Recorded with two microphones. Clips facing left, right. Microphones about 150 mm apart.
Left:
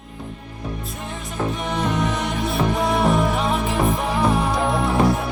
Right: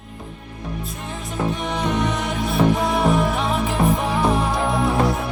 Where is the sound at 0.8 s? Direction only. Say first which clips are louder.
Right 1 dB; centre (ahead or behind).